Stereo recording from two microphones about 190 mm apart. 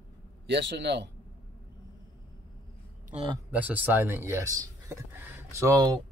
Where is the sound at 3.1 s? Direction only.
30° right (ahead or behind).